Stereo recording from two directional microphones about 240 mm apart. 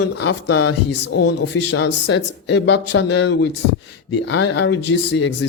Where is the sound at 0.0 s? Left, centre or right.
Left.